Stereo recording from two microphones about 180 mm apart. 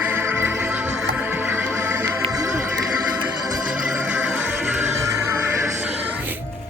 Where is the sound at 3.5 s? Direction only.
5° right (ahead or behind).